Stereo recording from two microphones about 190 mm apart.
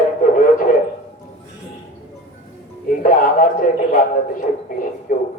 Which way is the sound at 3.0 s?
45° left (ahead or behind).